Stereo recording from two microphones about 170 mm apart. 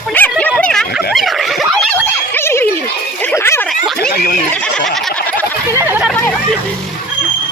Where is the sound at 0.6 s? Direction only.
5° left (ahead or behind).